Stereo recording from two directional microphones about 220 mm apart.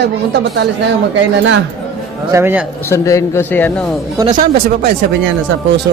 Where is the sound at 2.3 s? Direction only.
10° right (ahead or behind).